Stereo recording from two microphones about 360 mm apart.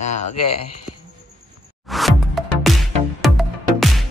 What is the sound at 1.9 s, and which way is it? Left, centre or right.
Music, centre.